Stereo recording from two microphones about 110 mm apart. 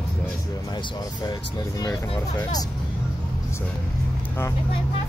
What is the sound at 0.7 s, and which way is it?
Speech, 40° left (ahead or behind).